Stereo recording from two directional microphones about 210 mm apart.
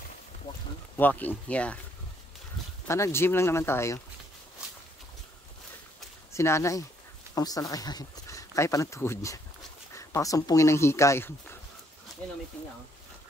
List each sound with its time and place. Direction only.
0.9 s speech: 10° left (ahead or behind)
2.9 s speech: 10° left (ahead or behind)
6.3 s speech: 15° left (ahead or behind)